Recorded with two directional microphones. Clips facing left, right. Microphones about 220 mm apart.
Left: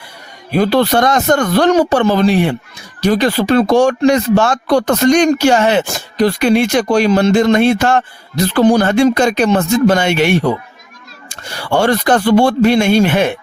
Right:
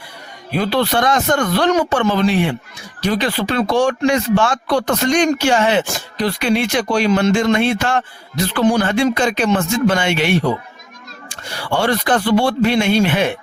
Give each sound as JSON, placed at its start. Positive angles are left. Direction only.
{"t": 0.5, "sound": "speech", "side_deg": 45}